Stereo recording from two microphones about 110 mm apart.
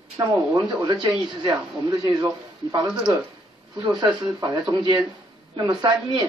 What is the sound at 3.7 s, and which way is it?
A man's voice, 45° right (ahead or behind).